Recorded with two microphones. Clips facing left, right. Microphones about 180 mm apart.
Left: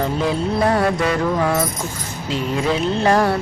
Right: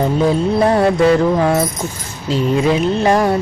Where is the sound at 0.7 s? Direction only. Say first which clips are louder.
Right 6 dB; 25° right (ahead or behind).